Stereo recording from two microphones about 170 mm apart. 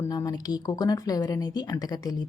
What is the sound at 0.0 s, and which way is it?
A woman's voice, 20° left (ahead or behind).